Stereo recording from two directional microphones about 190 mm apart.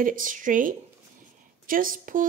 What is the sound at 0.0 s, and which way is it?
Speech, 45° right (ahead or behind).